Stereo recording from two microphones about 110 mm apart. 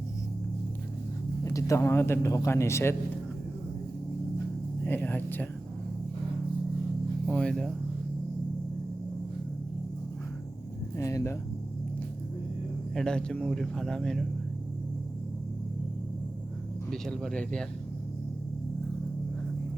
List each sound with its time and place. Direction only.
1.5 s speech: 30° left (ahead or behind)
4.9 s a sound: 20° left (ahead or behind)
7.3 s speech: 10° left (ahead or behind)
10.9 s speech: 25° left (ahead or behind)
12.9 s speech: 5° left (ahead or behind)
16.9 s speech: 5° left (ahead or behind)